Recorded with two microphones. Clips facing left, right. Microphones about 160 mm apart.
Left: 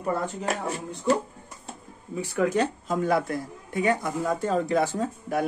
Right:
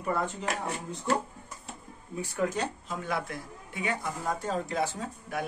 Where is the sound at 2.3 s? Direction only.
65° left (ahead or behind).